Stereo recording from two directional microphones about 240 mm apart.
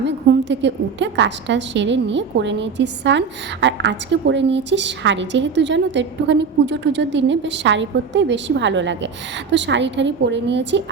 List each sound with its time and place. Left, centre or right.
0.0 s a woman's voice: right